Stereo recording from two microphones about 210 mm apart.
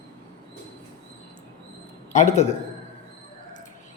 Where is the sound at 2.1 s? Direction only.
35° left (ahead or behind).